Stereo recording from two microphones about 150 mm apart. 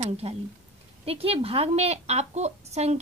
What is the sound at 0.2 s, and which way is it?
A woman's voice, 45° right (ahead or behind).